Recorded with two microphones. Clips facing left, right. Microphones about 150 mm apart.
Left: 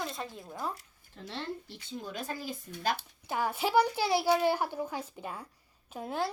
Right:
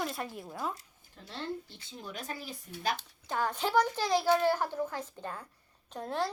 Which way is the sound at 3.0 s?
10° left (ahead or behind).